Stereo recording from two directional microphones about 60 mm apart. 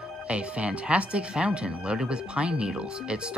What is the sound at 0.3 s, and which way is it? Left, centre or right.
Speech, centre.